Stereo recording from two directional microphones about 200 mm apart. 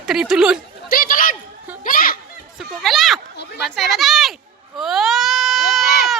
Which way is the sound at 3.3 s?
55° left (ahead or behind).